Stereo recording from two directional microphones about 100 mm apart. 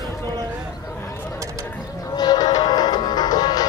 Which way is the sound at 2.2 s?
45° left (ahead or behind).